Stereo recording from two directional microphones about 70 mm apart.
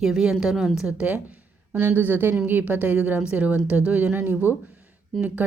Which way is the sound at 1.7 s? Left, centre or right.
Right.